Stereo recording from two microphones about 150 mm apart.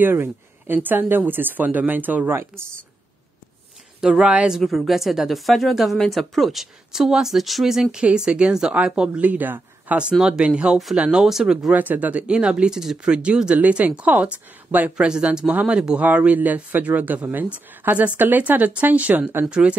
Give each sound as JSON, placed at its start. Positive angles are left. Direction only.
{"t": 0.0, "sound": "speech", "side_deg": -15}
{"t": 4.0, "sound": "speech", "side_deg": -5}